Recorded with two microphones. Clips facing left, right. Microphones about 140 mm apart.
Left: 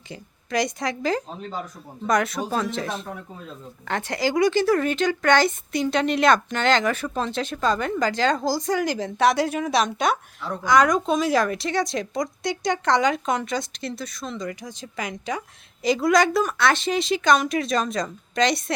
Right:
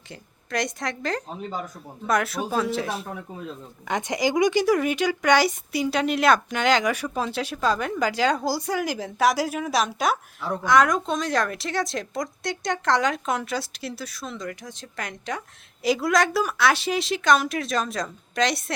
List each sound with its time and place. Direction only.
0.1 s speech: centre (ahead or behind)